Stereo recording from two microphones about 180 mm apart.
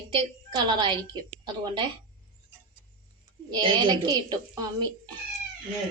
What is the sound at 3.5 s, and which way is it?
Speech, 25° right (ahead or behind).